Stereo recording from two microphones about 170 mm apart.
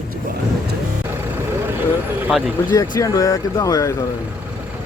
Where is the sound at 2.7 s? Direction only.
20° left (ahead or behind).